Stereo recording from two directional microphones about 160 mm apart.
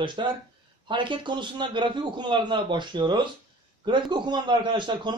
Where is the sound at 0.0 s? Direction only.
30° right (ahead or behind).